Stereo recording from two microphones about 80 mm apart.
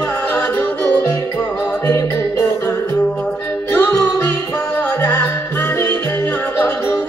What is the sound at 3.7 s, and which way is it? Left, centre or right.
Music, left.